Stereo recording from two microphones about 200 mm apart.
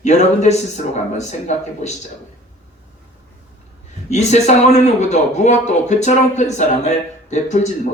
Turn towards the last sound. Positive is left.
turn(degrees=35)  # may be behind; listen again after turning